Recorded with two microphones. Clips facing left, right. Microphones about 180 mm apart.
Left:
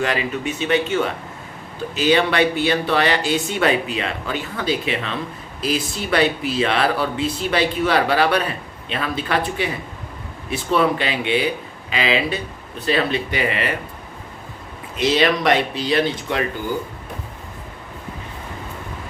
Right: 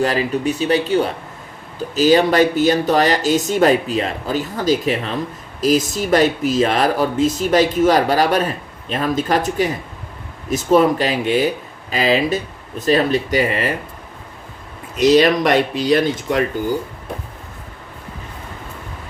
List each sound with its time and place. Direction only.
0.0 s speech: 40° right (ahead or behind)
14.9 s speech: 45° right (ahead or behind)